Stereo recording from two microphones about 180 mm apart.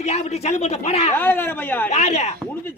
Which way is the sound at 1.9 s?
40° left (ahead or behind).